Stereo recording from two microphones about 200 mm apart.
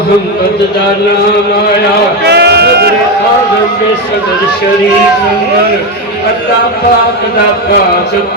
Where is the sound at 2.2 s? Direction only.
55° right (ahead or behind).